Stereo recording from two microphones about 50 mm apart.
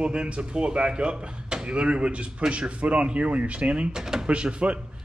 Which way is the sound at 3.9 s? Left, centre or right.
Centre.